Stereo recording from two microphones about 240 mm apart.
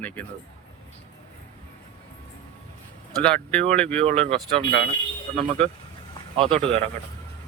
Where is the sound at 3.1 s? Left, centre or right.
Centre.